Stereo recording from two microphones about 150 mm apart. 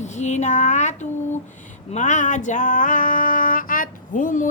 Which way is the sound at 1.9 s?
55° left (ahead or behind).